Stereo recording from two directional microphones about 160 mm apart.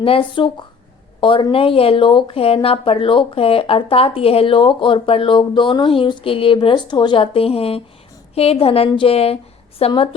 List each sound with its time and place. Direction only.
0.0 s speech: 35° left (ahead or behind)